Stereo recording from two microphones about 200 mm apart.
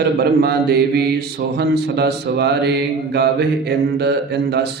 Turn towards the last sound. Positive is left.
turn(degrees=-55)  # may be behind; listen again after turning